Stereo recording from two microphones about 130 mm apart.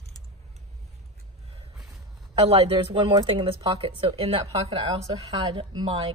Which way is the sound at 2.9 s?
35° right (ahead or behind).